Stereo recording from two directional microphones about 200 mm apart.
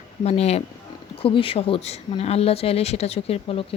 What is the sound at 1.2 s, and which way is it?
Speech, 25° left (ahead or behind).